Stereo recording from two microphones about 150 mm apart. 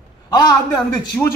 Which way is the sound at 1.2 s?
15° left (ahead or behind).